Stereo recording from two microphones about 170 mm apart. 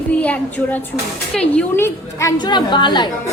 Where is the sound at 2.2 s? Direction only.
25° left (ahead or behind).